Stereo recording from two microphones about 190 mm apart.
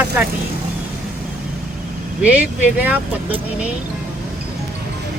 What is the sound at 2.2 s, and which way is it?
Speech, 5° right (ahead or behind).